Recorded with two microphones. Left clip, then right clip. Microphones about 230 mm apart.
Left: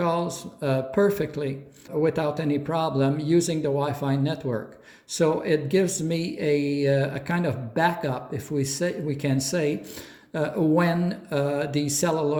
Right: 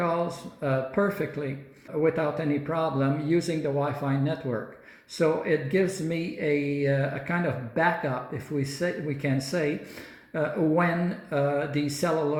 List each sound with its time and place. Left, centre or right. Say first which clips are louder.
0.0 s speech: left 2 dB; left